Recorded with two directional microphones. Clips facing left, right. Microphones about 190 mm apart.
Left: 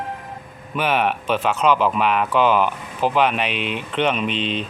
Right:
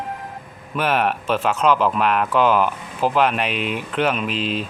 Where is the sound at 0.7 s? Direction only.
Centre (ahead or behind).